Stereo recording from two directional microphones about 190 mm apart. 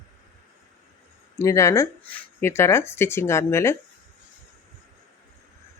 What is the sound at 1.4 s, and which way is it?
Speech, 15° left (ahead or behind).